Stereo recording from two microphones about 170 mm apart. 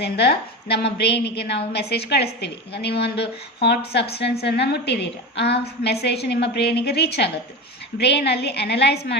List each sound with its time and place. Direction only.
0.0 s a woman's voice: 70° left (ahead or behind)